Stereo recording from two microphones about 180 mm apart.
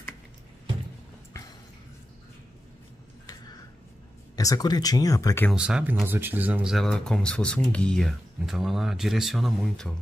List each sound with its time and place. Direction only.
4.4 s speech: 20° left (ahead or behind)
5.5 s speech: 5° right (ahead or behind)